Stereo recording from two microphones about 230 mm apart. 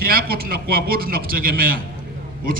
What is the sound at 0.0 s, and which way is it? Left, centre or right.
A man's voice, right.